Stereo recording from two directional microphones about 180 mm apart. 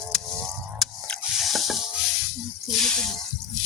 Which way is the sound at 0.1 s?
Centre (ahead or behind).